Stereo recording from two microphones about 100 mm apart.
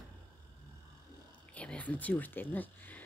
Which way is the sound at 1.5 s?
15° left (ahead or behind).